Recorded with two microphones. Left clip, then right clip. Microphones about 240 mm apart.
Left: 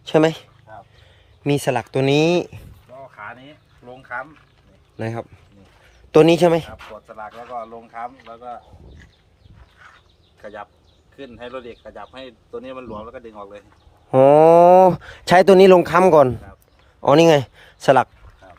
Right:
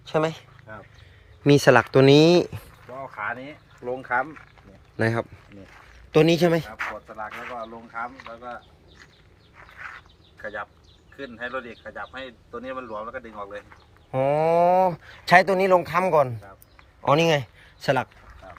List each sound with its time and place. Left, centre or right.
0.0 s speech: left
1.5 s speech: centre
3.2 s a sound: right
4.9 s speech: centre
6.1 s a man's voice: centre
7.2 s speech: left
10.4 s speech: left
14.2 s speech: left